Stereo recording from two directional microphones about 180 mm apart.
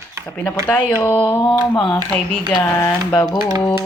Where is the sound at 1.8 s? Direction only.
25° left (ahead or behind).